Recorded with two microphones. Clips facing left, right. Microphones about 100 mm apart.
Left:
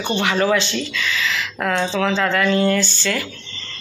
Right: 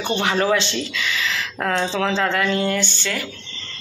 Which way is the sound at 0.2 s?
30° right (ahead or behind).